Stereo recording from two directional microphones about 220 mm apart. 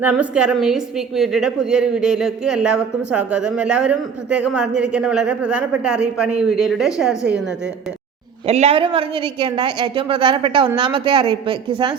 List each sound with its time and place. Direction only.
0.0 s a woman's voice: 5° right (ahead or behind)
8.4 s a woman's voice: 25° right (ahead or behind)